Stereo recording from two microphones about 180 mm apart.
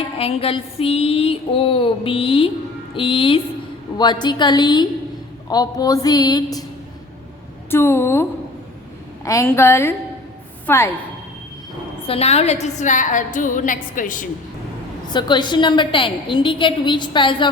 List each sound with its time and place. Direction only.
0.2 s a sound: 30° left (ahead or behind)
2.9 s a woman's voice: 30° left (ahead or behind)
7.7 s a woman's voice: 15° left (ahead or behind)
12.0 s a sound: 35° left (ahead or behind)
12.6 s a woman's voice: 40° left (ahead or behind)
15.1 s a woman's voice: 25° left (ahead or behind)